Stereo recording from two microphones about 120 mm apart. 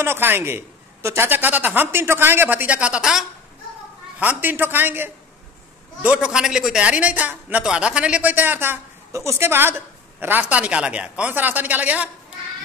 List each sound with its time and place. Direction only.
0.0 s a man's voice: 20° right (ahead or behind); by 3.3 s 5° right (ahead or behind)
4.2 s a man's voice: 15° right (ahead or behind)
6.0 s a man's voice: 5° right (ahead or behind)